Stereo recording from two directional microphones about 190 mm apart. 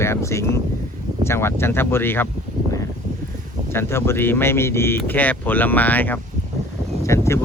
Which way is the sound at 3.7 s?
10° left (ahead or behind).